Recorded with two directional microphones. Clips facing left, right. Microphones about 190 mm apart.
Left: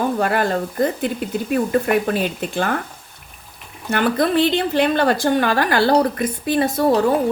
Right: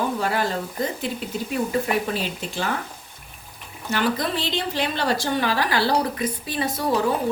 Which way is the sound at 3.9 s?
55° left (ahead or behind).